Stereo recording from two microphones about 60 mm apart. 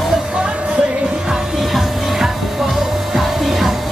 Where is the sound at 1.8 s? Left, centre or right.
Centre.